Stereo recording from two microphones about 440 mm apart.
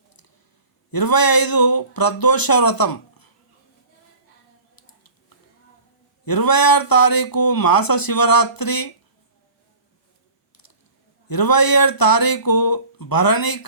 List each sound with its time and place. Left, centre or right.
0.9 s speech: left
4.7 s a sound: left
6.2 s speech: left
11.3 s speech: left